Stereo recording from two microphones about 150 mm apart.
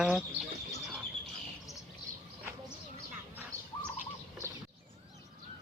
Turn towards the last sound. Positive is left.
turn(degrees=-20)  # may be behind; listen again after turning